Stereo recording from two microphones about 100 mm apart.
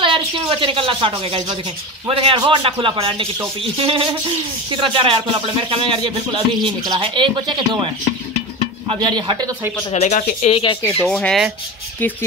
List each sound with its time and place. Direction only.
0.0 s a woman's voice: 60° right (ahead or behind)
2.0 s speech: 70° right (ahead or behind)
2.3 s speech: 50° right (ahead or behind)
2.6 s speech: 65° right (ahead or behind)
9.0 s speech: 45° right (ahead or behind)
9.9 s speech: 90° left; by 10.8 s 70° left (ahead or behind)
11.1 s speech: 10° left (ahead or behind)